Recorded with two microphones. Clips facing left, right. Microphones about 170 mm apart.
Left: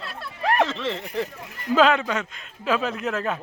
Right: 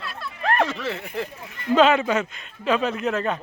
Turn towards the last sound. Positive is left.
turn(degrees=0)  # may be behind; listen again after turning